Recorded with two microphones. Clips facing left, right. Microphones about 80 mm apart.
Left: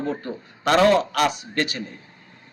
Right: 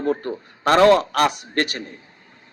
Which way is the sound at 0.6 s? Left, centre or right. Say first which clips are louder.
Right 3 dB; right.